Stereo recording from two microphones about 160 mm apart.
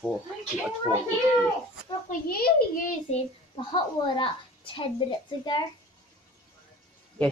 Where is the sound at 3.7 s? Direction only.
30° left (ahead or behind).